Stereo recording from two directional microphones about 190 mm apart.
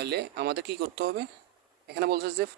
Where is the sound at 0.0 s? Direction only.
60° right (ahead or behind).